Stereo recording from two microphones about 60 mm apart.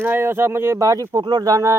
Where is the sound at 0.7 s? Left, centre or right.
Right.